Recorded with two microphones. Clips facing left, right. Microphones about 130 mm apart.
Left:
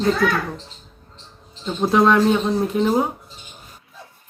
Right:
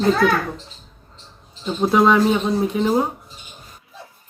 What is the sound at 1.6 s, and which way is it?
A man's voice, centre (ahead or behind).